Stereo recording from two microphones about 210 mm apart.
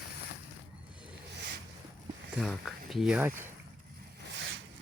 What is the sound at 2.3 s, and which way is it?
Speech, centre (ahead or behind).